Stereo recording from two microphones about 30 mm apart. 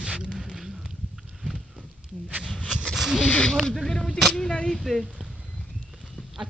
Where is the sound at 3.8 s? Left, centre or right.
Left.